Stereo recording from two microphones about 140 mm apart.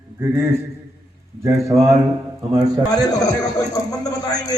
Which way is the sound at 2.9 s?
25° left (ahead or behind).